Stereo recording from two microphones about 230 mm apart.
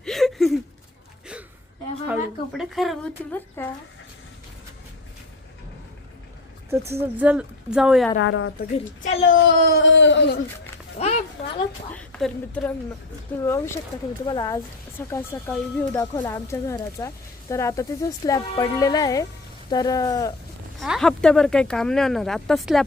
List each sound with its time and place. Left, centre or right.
0.0 s a sound: centre
2.0 s speech: centre
6.7 s speech: centre
8.2 s a woman's voice: left
9.3 s speech: left
10.9 s a sound: left
11.9 s speech: centre
20.7 s speech: centre